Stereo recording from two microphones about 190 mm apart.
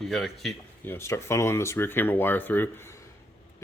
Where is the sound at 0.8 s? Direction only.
15° left (ahead or behind).